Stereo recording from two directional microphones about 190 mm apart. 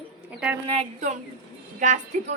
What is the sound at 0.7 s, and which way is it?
A woman's voice, 35° right (ahead or behind).